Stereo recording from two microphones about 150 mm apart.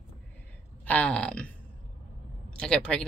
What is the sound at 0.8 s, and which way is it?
Speech, 10° left (ahead or behind).